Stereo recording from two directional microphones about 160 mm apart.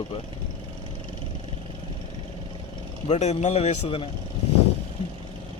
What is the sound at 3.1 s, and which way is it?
Speech, 45° left (ahead or behind).